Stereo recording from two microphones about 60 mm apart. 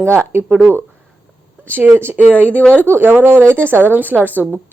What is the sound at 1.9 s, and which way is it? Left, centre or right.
Speech, right.